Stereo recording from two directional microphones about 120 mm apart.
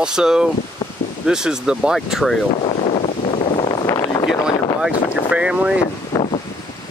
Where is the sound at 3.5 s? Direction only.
45° left (ahead or behind).